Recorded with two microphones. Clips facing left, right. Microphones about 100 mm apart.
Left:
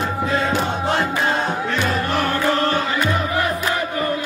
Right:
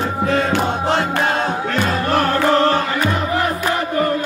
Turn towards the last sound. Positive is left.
turn(degrees=-40)  # may be behind; listen again after turning